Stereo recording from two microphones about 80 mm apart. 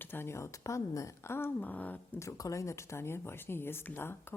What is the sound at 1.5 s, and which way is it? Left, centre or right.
Speech, left.